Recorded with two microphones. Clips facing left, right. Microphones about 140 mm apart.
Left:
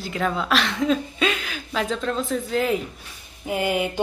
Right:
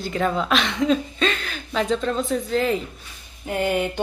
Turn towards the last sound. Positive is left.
turn(degrees=5)  # may be behind; listen again after turning